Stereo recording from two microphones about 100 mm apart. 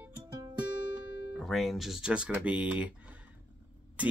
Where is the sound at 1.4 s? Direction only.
Centre (ahead or behind).